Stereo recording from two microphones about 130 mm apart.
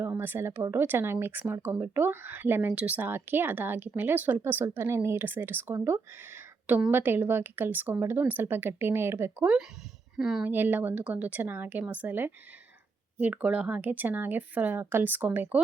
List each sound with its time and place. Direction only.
0.0 s speech: 15° right (ahead or behind)
10.2 s speech: 5° right (ahead or behind)
10.4 s speech: 15° right (ahead or behind)